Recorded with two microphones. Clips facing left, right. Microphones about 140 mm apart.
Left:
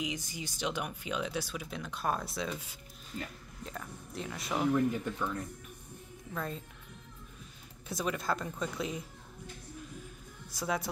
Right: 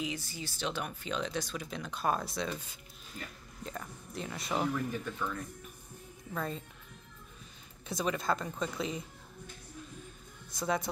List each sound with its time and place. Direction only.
0.0 s speech: 15° left (ahead or behind); by 4.6 s centre (ahead or behind)
4.9 s speech: 20° left (ahead or behind)
6.3 s speech: centre (ahead or behind)
7.9 s speech: centre (ahead or behind)
10.5 s speech: 5° left (ahead or behind)